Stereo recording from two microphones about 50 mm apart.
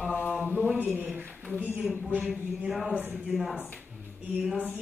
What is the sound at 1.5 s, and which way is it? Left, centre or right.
Speech, right.